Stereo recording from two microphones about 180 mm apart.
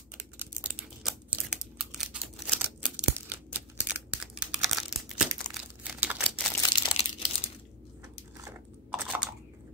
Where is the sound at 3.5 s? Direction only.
10° right (ahead or behind).